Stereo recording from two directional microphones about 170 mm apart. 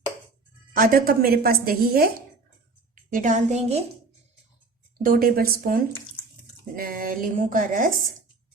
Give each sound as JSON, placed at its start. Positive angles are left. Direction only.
{"t": 0.7, "sound": "speech", "side_deg": -55}
{"t": 2.9, "sound": "a woman's voice", "side_deg": -50}
{"t": 5.0, "sound": "speech", "side_deg": -55}
{"t": 6.7, "sound": "speech", "side_deg": -55}